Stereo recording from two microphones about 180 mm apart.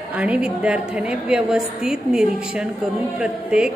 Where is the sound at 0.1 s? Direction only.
5° right (ahead or behind).